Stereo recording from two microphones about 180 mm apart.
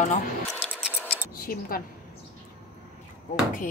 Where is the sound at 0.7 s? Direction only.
5° right (ahead or behind).